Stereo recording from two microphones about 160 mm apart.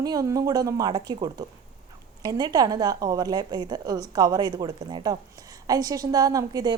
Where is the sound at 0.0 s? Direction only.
20° right (ahead or behind).